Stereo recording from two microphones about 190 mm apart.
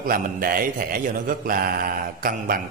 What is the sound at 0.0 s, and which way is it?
A man's voice, 50° right (ahead or behind).